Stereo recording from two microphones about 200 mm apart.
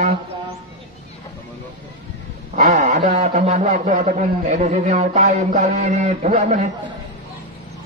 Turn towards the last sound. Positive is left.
turn(degrees=-35)  # may be behind; listen again after turning